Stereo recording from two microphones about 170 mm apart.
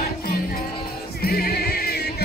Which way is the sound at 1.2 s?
65° left (ahead or behind).